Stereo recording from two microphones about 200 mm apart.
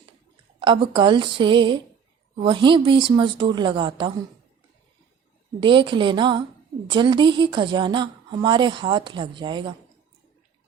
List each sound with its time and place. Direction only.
0.6 s a woman's voice: 25° right (ahead or behind)
5.5 s a woman's voice: 25° right (ahead or behind)